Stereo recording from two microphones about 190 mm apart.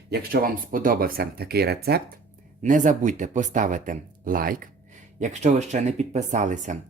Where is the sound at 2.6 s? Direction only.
40° right (ahead or behind).